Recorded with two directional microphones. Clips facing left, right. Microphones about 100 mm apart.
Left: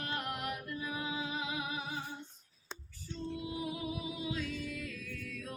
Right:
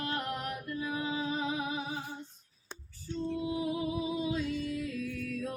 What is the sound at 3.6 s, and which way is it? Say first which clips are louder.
Music: right 6 dB; 30° right (ahead or behind).